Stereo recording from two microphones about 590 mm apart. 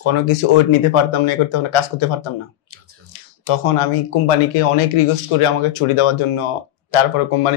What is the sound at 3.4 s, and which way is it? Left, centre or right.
Speech, left.